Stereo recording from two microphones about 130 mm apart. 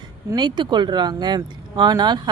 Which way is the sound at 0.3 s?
35° right (ahead or behind).